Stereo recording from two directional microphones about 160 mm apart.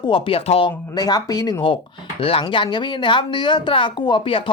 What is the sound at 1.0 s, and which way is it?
Speech, 25° left (ahead or behind).